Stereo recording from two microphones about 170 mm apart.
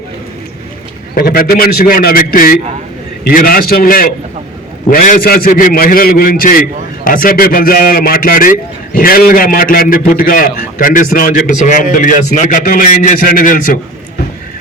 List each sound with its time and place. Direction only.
1.1 s a man's voice: 60° left (ahead or behind)